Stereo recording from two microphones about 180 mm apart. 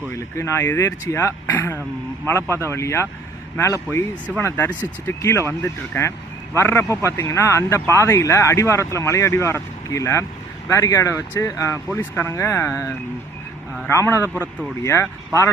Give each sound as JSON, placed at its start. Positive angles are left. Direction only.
{"t": 0.1, "sound": "speech", "side_deg": 15}